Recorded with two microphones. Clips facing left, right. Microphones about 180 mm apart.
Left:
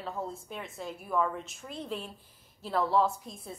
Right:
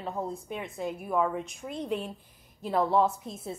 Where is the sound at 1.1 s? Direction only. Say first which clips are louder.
Right 1 dB; 10° right (ahead or behind).